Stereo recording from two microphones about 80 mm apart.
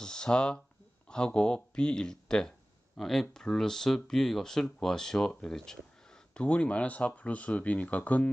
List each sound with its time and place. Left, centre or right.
0.0 s speech: centre